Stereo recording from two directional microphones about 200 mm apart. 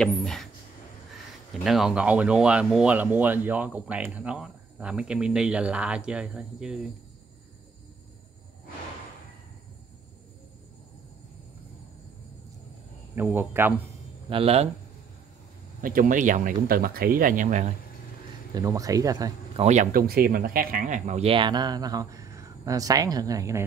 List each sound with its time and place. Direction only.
0.0 s speech: 5° left (ahead or behind)
1.5 s speech: centre (ahead or behind)
13.1 s speech: 10° right (ahead or behind)
14.3 s speech: 30° right (ahead or behind)
15.8 s speech: 45° right (ahead or behind)
18.5 s speech: 15° right (ahead or behind)
19.6 s speech: 35° right (ahead or behind); by 23.6 s 15° right (ahead or behind)